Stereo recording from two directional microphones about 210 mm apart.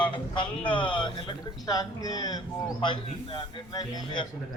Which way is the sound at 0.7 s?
5° left (ahead or behind).